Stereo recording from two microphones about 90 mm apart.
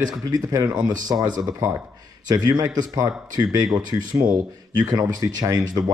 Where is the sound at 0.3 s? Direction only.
45° right (ahead or behind).